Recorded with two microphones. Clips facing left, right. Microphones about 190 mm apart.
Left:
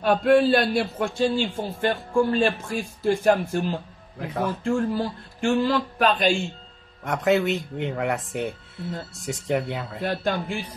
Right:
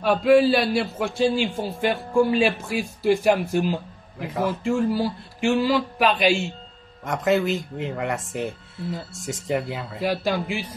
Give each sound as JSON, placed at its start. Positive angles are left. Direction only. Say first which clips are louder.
{"t": 0.0, "sound": "a man's voice", "louder": "right 1 dB", "side_deg": 0}